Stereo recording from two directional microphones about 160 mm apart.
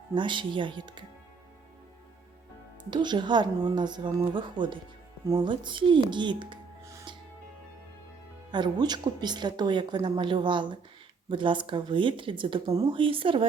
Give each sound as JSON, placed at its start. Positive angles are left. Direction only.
{"t": 0.1, "sound": "speech", "side_deg": -30}
{"t": 2.9, "sound": "speech", "side_deg": -30}
{"t": 8.4, "sound": "speech", "side_deg": -30}